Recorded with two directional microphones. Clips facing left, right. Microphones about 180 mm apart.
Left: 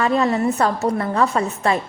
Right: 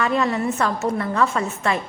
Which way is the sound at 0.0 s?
35° left (ahead or behind).